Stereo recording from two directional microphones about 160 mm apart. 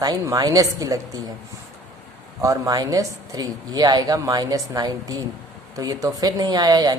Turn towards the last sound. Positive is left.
turn(degrees=-25)  # may be behind; listen again after turning